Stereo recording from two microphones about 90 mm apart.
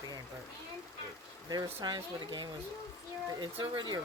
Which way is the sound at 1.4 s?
50° right (ahead or behind).